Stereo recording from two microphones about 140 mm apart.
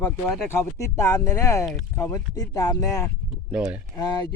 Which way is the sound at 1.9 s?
20° left (ahead or behind).